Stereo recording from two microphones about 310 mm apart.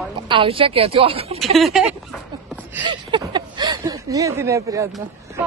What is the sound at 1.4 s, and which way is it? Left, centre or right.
Speech, centre.